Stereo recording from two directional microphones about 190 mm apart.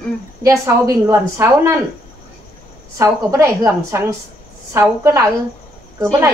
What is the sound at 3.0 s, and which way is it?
A woman's voice, 15° right (ahead or behind).